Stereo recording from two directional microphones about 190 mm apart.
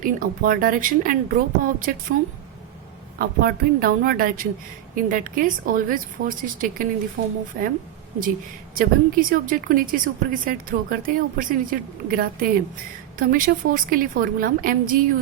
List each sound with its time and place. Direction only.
0.0 s a woman's voice: 45° right (ahead or behind)
3.2 s a woman's voice: 50° right (ahead or behind)
8.7 s a woman's voice: 45° right (ahead or behind)